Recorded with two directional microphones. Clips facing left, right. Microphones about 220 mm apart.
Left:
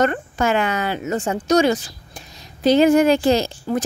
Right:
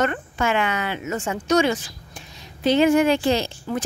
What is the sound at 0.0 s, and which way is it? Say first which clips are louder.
A woman's voice: left 4 dB; 40° left (ahead or behind).